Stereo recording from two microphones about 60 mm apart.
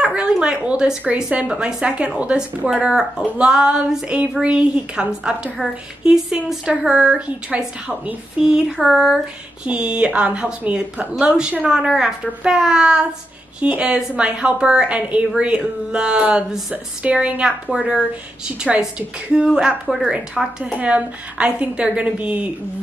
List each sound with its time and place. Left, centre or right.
0.0 s a woman's voice: centre
8.4 s a woman's voice: centre
9.7 s a woman's voice: right